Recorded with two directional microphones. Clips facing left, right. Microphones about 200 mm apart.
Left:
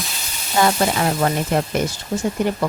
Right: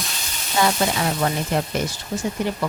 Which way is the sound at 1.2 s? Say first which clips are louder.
Left 3 dB; 45° left (ahead or behind).